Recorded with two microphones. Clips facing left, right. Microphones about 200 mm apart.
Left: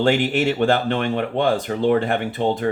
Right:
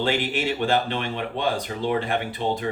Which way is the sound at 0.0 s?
45° left (ahead or behind).